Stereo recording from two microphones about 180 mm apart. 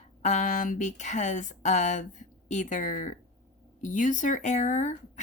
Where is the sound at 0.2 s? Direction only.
40° left (ahead or behind).